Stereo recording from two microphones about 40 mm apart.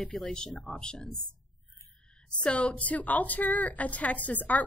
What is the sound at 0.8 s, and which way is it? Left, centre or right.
Speech, centre.